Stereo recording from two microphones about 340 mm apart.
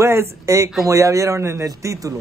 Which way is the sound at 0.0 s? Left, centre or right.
Centre.